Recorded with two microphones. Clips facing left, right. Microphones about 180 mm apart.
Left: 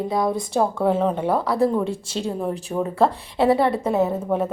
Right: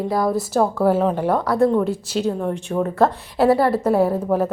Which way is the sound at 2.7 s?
15° left (ahead or behind).